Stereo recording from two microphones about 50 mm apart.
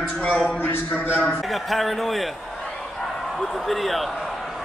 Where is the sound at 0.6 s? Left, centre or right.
Left.